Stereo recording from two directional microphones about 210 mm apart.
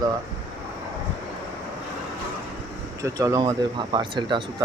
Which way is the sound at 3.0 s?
15° right (ahead or behind).